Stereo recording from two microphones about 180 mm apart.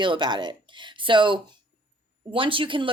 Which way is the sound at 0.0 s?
25° right (ahead or behind).